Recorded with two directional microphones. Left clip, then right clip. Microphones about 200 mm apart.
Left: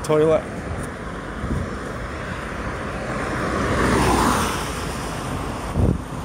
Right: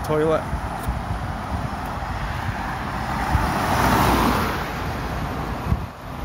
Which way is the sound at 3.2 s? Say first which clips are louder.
Right 1 dB; 55° right (ahead or behind).